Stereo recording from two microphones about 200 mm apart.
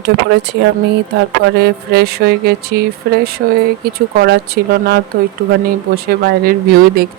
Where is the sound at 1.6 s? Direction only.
55° right (ahead or behind).